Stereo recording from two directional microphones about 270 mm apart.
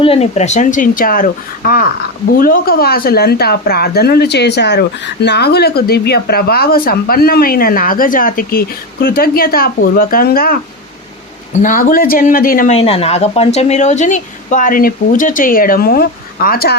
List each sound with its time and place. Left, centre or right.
0.0 s speech: left